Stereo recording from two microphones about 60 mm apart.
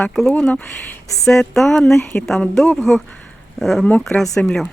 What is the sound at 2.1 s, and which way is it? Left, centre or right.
Speech, centre.